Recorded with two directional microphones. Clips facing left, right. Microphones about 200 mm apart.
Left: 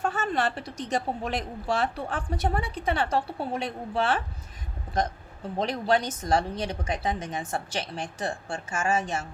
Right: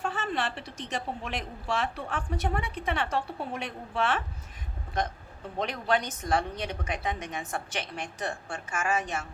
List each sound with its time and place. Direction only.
0.0 s a woman's voice: 45° left (ahead or behind)
5.5 s a woman's voice: 35° left (ahead or behind)